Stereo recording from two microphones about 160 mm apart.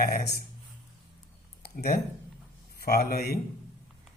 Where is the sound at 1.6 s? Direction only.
70° left (ahead or behind).